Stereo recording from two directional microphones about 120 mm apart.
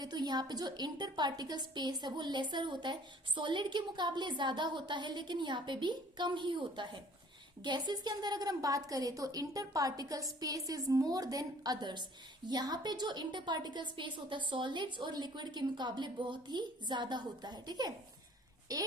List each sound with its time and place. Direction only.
0.0 s a woman's voice: 35° right (ahead or behind)